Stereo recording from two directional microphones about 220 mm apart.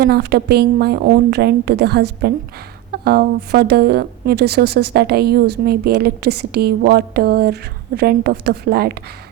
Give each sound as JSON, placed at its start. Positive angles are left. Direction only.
{"t": 0.0, "sound": "speech", "side_deg": -45}